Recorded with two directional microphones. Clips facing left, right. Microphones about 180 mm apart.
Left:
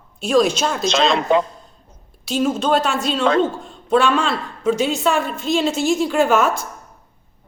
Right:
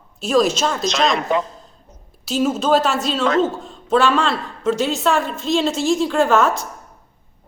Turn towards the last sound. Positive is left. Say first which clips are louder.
# even
turn(degrees=0)  # may be behind; listen again after turning